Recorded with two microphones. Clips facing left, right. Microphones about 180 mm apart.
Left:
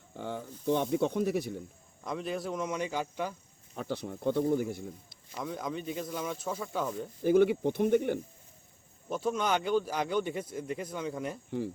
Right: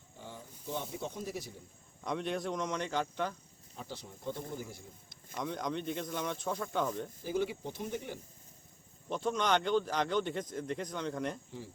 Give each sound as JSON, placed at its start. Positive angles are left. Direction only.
{"t": 0.2, "sound": "speech", "side_deg": 65}
{"t": 2.0, "sound": "speech", "side_deg": 0}
{"t": 3.8, "sound": "speech", "side_deg": 60}
{"t": 5.3, "sound": "speech", "side_deg": 5}
{"t": 7.3, "sound": "speech", "side_deg": 60}
{"t": 9.0, "sound": "speech", "side_deg": 5}